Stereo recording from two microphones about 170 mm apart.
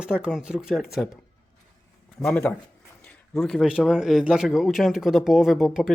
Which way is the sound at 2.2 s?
10° left (ahead or behind).